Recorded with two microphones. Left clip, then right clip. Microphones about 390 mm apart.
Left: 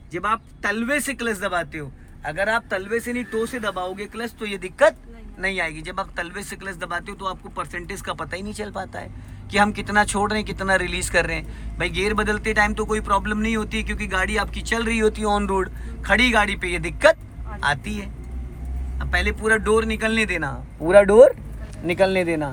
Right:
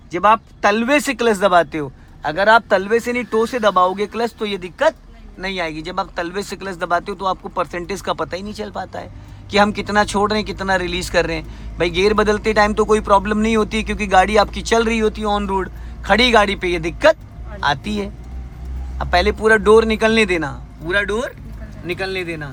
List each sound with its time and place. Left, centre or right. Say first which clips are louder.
0.1 s speech: right 10 dB; centre
20.8 s speech: left 8 dB; centre